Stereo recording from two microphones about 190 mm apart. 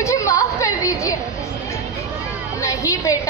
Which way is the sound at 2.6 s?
15° left (ahead or behind).